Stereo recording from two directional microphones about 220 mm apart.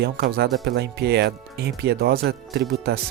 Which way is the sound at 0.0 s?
45° right (ahead or behind).